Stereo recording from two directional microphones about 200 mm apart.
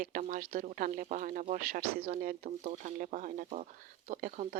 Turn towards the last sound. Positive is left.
turn(degrees=-40)  # may be behind; listen again after turning